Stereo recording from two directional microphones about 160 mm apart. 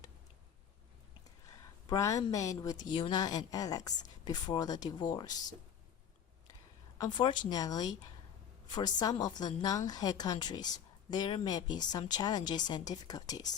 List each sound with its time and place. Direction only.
1.9 s speech: 20° left (ahead or behind)
7.0 s speech: 30° left (ahead or behind)